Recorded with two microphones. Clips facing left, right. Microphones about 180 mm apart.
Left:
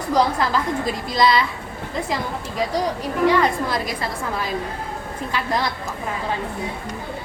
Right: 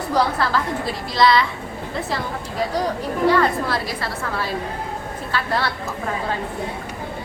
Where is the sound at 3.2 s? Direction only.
20° left (ahead or behind).